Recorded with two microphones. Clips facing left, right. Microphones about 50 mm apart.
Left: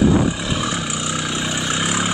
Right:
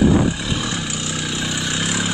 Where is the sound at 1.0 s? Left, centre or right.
Left.